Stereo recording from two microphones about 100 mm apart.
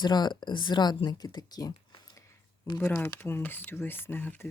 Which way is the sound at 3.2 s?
20° left (ahead or behind).